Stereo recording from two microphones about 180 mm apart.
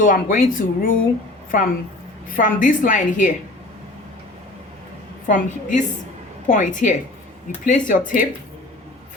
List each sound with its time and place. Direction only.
0.0 s a woman's voice: 50° left (ahead or behind)
5.2 s a woman's voice: 45° left (ahead or behind)